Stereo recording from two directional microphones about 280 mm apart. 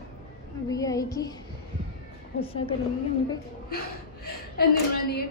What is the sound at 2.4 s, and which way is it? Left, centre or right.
Speech, left.